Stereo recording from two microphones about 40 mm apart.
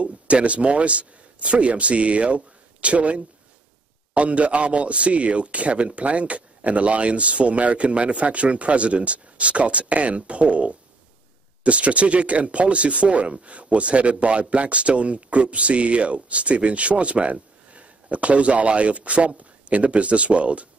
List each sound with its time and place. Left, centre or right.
0.0 s a man's voice: right